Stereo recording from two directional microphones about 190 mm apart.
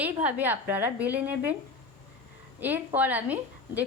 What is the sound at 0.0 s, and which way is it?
A woman's voice, 10° right (ahead or behind).